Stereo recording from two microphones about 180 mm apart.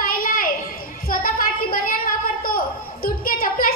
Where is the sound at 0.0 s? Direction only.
50° left (ahead or behind).